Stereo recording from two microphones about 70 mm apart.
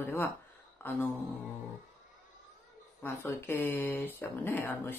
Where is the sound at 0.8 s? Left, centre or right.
Left.